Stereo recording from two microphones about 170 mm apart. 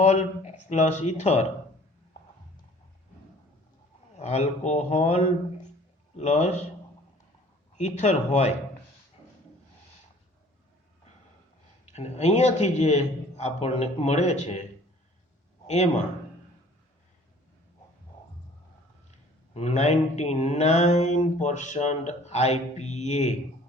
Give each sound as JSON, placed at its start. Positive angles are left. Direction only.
{"t": 0.0, "sound": "mantra", "side_deg": 45}
{"t": 4.2, "sound": "a man's voice", "side_deg": 40}
{"t": 6.1, "sound": "mantra", "side_deg": 45}
{"t": 7.8, "sound": "mantra", "side_deg": 45}
{"t": 11.9, "sound": "a man's voice", "side_deg": 40}
{"t": 15.6, "sound": "a man's voice", "side_deg": 40}
{"t": 19.5, "sound": "mantra", "side_deg": 40}